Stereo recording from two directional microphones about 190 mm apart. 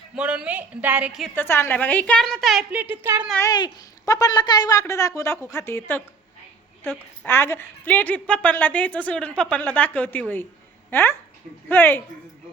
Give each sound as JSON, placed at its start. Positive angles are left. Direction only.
{"t": 0.2, "sound": "speech", "side_deg": -5}
{"t": 1.4, "sound": "a woman's voice", "side_deg": 10}
{"t": 2.8, "sound": "speech", "side_deg": -10}
{"t": 3.4, "sound": "a woman's voice", "side_deg": 20}
{"t": 7.3, "sound": "a woman's voice", "side_deg": 10}